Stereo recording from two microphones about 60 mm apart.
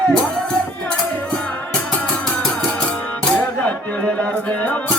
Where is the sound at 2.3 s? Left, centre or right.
Centre.